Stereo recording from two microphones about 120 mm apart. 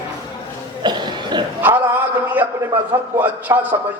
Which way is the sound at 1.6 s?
15° right (ahead or behind).